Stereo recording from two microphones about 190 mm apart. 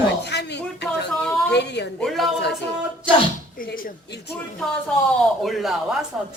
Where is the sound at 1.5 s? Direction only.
60° left (ahead or behind).